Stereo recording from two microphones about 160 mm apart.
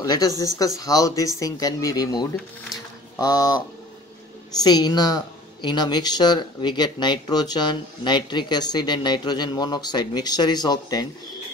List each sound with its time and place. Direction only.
0.0 s speech: 25° left (ahead or behind)